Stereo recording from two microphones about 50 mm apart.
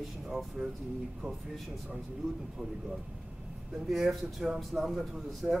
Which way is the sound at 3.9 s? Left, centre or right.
Centre.